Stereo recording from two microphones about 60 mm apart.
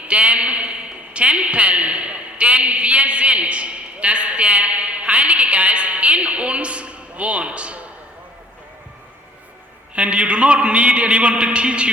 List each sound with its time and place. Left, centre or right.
0.1 s a man's voice: centre
9.9 s a man's voice: centre